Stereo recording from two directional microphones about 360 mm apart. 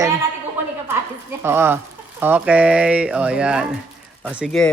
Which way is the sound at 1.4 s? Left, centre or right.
Centre.